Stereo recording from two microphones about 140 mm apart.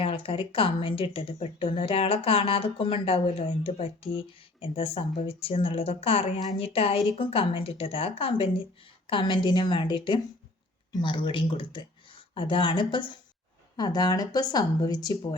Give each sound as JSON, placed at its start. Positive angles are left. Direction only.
{"t": 0.0, "sound": "speech", "side_deg": 40}